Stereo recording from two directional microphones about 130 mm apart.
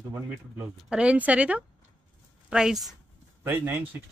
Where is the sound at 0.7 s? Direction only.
5° right (ahead or behind).